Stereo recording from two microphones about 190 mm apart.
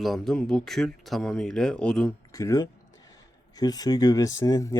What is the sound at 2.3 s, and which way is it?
Speech, 15° left (ahead or behind).